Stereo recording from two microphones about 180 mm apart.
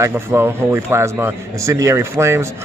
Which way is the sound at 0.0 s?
15° right (ahead or behind).